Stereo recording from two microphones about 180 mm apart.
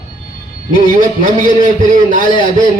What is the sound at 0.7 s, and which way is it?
A man's voice, 45° right (ahead or behind).